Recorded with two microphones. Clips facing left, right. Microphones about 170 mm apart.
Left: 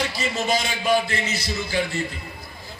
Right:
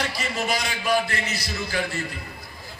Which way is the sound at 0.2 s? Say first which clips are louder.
Left 3 dB; 25° left (ahead or behind).